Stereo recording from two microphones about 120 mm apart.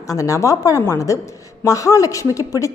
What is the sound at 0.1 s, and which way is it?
A woman's voice, 25° left (ahead or behind).